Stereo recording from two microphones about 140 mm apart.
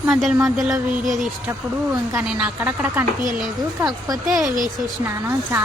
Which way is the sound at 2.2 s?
5° right (ahead or behind).